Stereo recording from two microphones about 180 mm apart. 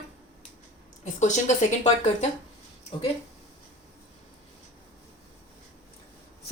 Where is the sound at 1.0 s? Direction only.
40° left (ahead or behind).